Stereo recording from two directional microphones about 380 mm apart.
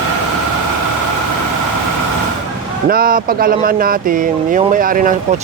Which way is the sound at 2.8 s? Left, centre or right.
Right.